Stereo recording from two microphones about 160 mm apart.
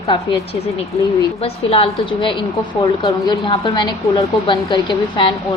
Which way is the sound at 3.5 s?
35° left (ahead or behind).